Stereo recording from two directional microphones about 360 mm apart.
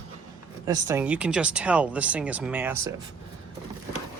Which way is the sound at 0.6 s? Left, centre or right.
Centre.